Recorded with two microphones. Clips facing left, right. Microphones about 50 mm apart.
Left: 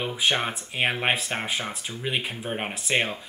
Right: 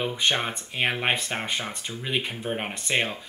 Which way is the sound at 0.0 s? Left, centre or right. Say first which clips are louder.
Even; centre.